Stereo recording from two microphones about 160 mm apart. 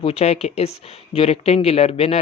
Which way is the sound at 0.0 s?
40° left (ahead or behind).